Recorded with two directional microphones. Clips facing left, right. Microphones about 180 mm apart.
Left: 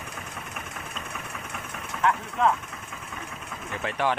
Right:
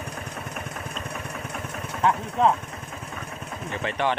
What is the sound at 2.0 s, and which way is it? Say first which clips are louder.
Vehicle: right 2 dB; 35° right (ahead or behind).